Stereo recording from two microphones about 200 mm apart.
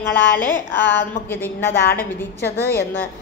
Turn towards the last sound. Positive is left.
turn(degrees=10)  # may be behind; listen again after turning